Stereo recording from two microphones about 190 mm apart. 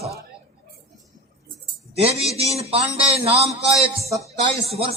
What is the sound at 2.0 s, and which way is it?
A man's voice, 30° right (ahead or behind).